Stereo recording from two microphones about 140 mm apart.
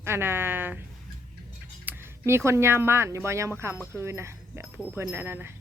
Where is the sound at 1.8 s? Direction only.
15° right (ahead or behind).